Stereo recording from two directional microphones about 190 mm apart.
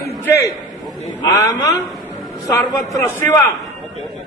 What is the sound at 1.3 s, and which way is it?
Speech, 15° left (ahead or behind).